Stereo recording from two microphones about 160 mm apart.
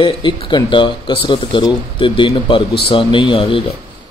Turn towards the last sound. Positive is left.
turn(degrees=35)  # may be behind; listen again after turning